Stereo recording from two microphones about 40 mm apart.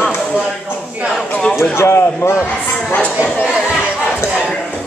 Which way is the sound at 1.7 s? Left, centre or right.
Left.